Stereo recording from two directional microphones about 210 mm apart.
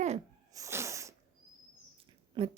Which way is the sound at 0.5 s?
15° right (ahead or behind).